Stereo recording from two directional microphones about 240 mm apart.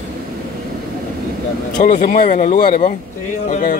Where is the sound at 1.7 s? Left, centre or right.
Left.